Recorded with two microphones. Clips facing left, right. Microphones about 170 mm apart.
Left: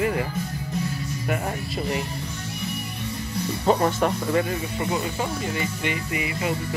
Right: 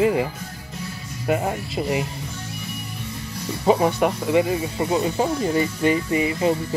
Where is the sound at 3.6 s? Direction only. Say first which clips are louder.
Right 3 dB; 5° right (ahead or behind).